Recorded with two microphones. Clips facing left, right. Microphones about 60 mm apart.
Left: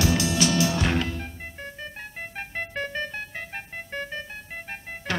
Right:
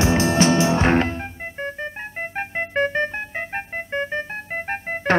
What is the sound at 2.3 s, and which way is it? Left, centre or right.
Music, right.